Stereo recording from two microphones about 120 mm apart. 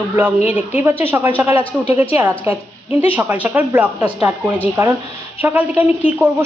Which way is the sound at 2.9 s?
50° left (ahead or behind).